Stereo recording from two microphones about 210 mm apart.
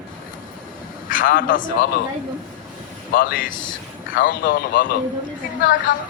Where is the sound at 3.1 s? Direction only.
45° left (ahead or behind).